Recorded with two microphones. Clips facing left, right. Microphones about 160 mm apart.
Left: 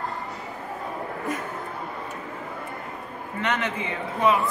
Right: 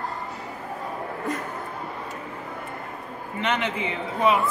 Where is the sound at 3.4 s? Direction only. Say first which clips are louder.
Right 1 dB; 20° right (ahead or behind).